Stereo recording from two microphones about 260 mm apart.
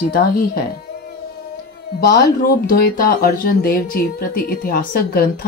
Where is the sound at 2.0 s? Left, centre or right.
Left.